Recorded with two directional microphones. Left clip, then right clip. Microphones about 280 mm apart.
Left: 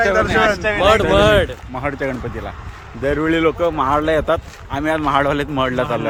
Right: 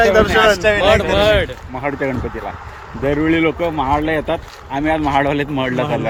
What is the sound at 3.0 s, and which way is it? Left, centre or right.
Speech, centre.